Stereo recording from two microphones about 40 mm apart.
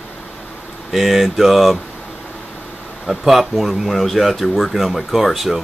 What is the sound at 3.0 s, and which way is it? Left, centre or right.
Speech, centre.